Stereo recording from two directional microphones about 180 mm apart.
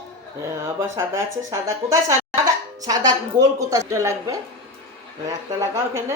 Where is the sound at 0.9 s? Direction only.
15° right (ahead or behind).